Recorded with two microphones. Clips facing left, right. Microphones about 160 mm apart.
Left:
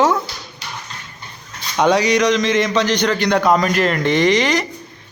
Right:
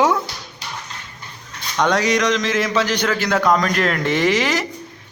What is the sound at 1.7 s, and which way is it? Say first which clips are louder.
A man's voice: left 3 dB; 5° left (ahead or behind).